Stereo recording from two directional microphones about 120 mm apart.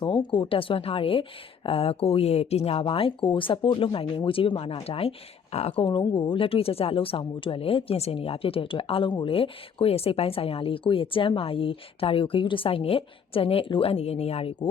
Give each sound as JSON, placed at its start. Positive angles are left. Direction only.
{"t": 0.0, "sound": "speech", "side_deg": 40}
{"t": 5.7, "sound": "speech", "side_deg": 45}